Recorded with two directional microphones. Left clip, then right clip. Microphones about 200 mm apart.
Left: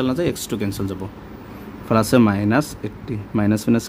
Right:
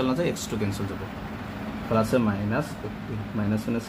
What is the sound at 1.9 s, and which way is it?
Speech, 60° left (ahead or behind).